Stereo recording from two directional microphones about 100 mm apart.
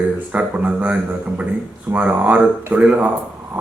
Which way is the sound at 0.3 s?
15° right (ahead or behind).